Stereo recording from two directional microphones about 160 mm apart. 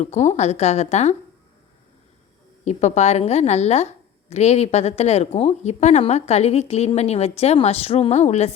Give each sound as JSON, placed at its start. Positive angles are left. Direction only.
{"t": 0.0, "sound": "a woman's voice", "side_deg": 45}
{"t": 2.6, "sound": "a woman's voice", "side_deg": 45}